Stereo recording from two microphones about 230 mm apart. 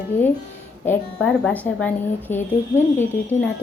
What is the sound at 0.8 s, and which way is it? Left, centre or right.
A woman's voice, centre.